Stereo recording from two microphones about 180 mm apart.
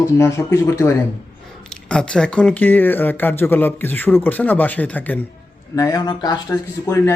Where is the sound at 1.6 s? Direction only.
5° left (ahead or behind).